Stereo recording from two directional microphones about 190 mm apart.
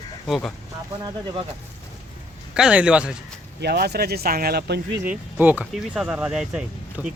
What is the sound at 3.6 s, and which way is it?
Speech, 60° right (ahead or behind).